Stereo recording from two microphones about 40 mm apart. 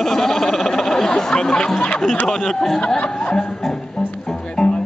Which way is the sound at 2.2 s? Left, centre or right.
Centre.